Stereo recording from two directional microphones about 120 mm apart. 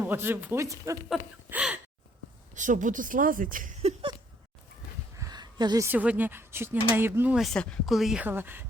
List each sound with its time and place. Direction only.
0.0 s speech: 20° right (ahead or behind)
1.5 s gasp: 10° right (ahead or behind)
2.6 s a woman's voice: 90° right
5.1 s a sound: 30° right (ahead or behind)
5.8 s speech: 15° right (ahead or behind)
7.3 s a woman's voice: 5° left (ahead or behind)
8.2 s speech: 15° right (ahead or behind)